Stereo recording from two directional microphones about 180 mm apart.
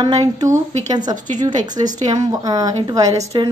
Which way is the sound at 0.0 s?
20° right (ahead or behind).